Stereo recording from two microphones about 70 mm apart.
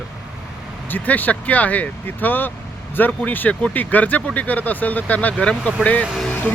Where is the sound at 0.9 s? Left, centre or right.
Left.